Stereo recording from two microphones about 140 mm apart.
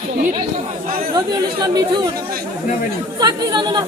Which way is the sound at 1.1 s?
30° right (ahead or behind).